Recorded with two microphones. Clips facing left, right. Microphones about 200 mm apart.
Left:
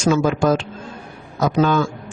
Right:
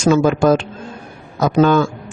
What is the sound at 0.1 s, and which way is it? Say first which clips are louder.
Speech: right 4 dB; 55° right (ahead or behind).